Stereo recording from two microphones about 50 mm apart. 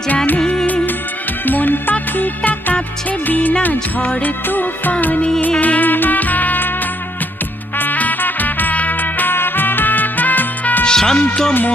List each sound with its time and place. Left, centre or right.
0.3 s music: centre
1.5 s music: left
7.8 s music: left
10.8 s music: centre